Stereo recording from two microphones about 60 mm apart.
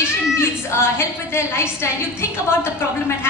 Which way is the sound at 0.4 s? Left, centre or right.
Left.